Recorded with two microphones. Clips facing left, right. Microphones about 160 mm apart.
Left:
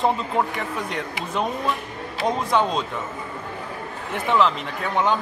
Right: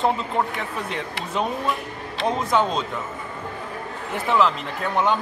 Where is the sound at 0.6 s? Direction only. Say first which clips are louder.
Left 1 dB; centre (ahead or behind).